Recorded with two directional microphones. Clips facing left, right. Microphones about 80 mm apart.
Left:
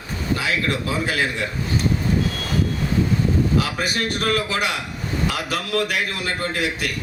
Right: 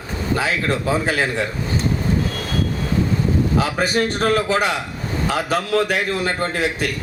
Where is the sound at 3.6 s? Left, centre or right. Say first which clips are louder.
Right 4 dB; right.